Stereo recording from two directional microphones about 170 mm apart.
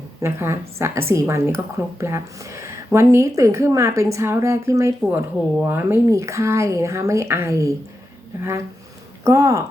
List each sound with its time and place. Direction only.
0.2 s speech: 15° right (ahead or behind)
9.2 s speech: 15° right (ahead or behind)